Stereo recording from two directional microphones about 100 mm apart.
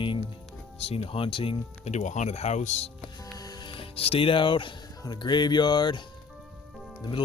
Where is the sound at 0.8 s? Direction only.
80° left.